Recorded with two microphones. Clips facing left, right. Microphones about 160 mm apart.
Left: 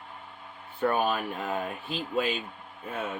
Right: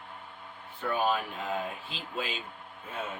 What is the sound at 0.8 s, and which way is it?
Speech, 55° left (ahead or behind).